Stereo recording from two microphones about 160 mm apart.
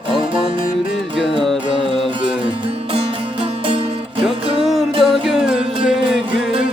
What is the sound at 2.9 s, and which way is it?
Music, 35° right (ahead or behind).